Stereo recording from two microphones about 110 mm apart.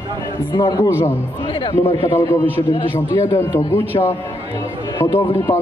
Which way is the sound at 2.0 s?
25° left (ahead or behind).